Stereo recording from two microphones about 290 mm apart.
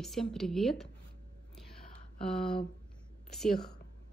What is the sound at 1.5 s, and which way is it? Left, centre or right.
Whispering, centre.